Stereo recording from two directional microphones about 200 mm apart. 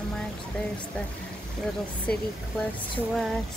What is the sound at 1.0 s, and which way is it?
Speech, 5° left (ahead or behind).